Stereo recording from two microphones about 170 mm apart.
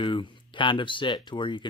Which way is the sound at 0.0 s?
30° left (ahead or behind).